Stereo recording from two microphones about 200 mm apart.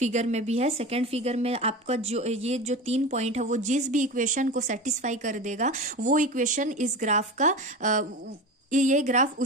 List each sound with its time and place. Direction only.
0.0 s speech: 35° right (ahead or behind)